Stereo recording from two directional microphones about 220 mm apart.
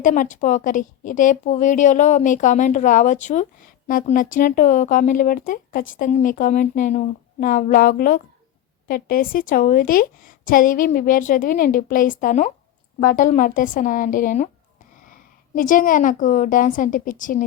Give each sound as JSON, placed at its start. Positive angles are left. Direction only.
{"t": 0.0, "sound": "a woman's voice", "side_deg": 35}